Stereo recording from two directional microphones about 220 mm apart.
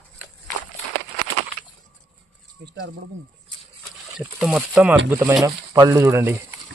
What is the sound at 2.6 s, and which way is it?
Speech, 45° right (ahead or behind).